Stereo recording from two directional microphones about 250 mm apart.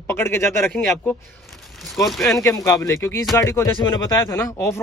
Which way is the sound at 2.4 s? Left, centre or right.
Centre.